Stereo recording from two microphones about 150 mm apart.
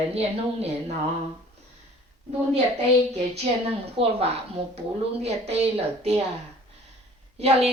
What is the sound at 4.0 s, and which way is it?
Speech, 40° right (ahead or behind).